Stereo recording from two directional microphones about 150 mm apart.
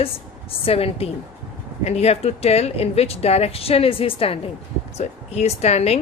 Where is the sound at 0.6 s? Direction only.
40° left (ahead or behind).